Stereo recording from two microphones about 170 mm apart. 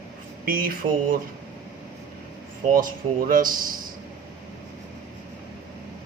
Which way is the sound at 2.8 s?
55° right (ahead or behind).